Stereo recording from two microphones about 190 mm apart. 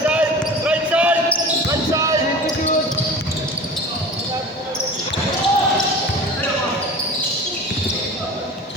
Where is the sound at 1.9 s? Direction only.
15° right (ahead or behind).